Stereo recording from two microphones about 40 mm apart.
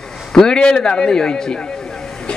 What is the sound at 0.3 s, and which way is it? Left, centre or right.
A man's voice, centre.